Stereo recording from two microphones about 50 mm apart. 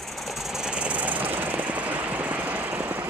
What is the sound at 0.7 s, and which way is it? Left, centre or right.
Engine, right.